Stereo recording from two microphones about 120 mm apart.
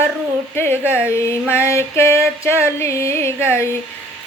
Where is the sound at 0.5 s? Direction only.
20° left (ahead or behind).